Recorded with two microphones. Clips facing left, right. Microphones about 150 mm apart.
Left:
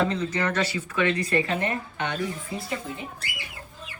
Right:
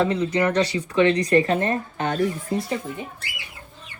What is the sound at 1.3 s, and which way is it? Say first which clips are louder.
Speech: right 6 dB; 40° right (ahead or behind).